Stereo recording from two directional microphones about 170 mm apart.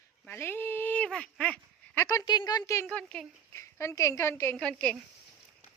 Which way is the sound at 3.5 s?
15° left (ahead or behind).